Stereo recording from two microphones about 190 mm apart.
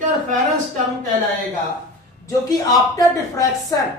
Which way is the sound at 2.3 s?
20° left (ahead or behind).